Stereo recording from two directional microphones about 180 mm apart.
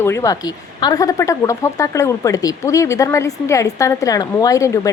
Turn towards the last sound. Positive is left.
turn(degrees=15)  # may be behind; listen again after turning